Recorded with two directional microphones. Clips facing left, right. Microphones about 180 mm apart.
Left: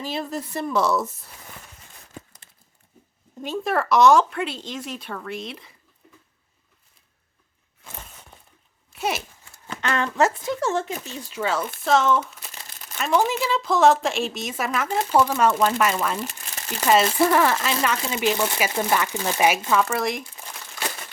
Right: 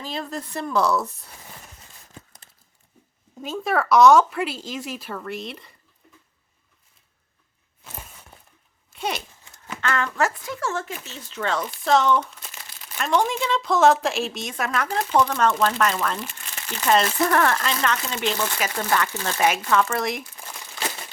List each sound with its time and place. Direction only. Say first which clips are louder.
0.0 s speech: left 2 dB; 5° left (ahead or behind)
3.4 s speech: even; centre (ahead or behind)
8.9 s a sound: left 2 dB; 5° left (ahead or behind)
9.8 s speech: left 2 dB; 20° left (ahead or behind); by 20.6 s centre (ahead or behind)